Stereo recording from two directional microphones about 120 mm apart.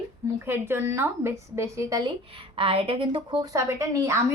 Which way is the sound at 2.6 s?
50° right (ahead or behind).